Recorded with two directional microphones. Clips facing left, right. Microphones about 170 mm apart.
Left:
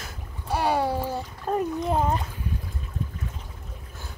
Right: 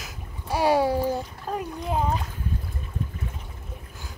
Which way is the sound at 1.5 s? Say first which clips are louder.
Left 5 dB; 5° left (ahead or behind).